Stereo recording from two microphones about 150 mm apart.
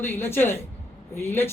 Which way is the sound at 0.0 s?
15° left (ahead or behind).